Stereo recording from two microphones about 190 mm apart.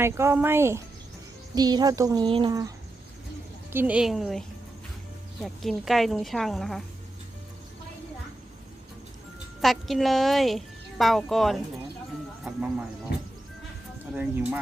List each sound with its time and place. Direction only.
0.0 s a woman's voice: 15° right (ahead or behind)
9.6 s a woman's voice: centre (ahead or behind)
14.1 s speech: 10° right (ahead or behind)